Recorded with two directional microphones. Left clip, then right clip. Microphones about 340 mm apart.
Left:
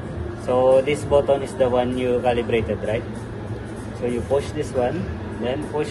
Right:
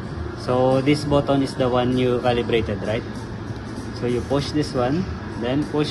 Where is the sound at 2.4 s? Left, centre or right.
Right.